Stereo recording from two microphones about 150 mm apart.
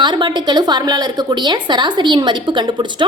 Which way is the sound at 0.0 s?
30° right (ahead or behind).